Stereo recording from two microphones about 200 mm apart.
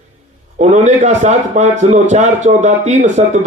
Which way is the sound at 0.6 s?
35° right (ahead or behind).